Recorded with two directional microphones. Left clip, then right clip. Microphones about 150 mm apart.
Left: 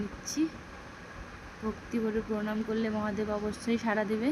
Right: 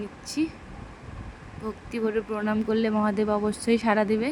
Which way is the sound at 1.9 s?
30° right (ahead or behind).